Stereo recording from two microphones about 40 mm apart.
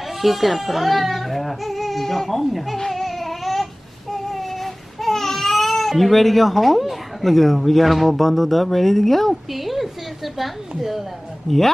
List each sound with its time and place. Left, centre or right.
0.2 s speech: centre
2.8 s baby cry: centre
10.8 s speech: centre